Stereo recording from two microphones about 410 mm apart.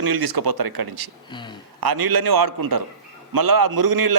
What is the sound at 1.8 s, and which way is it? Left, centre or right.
A man's voice, right.